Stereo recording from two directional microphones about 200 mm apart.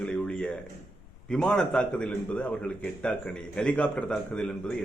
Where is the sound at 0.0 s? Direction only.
5° left (ahead or behind).